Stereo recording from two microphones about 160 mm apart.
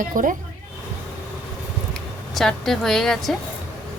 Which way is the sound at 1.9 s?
Centre (ahead or behind).